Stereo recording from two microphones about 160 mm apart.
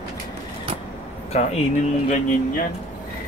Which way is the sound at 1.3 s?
45° left (ahead or behind).